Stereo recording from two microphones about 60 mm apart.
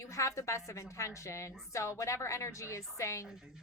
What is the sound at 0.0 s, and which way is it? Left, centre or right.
A woman's voice, left.